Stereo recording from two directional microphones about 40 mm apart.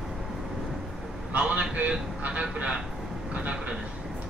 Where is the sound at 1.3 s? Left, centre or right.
Right.